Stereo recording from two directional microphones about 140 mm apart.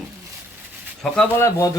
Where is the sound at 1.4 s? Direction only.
20° left (ahead or behind).